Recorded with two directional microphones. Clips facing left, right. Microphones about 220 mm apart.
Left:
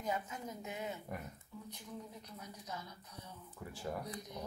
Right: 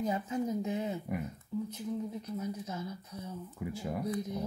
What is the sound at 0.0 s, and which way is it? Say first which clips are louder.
Speech: right 8 dB; 30° right (ahead or behind).